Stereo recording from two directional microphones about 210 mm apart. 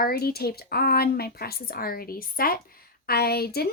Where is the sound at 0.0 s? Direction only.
45° left (ahead or behind).